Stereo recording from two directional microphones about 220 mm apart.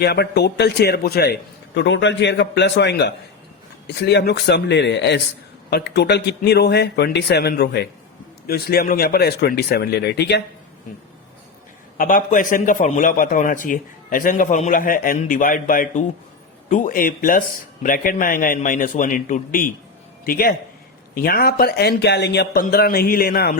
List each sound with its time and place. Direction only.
0.0 s a man's voice: 50° left (ahead or behind)
11.9 s a man's voice: 40° left (ahead or behind)